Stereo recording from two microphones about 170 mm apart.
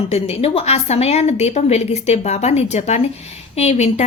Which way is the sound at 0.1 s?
35° left (ahead or behind).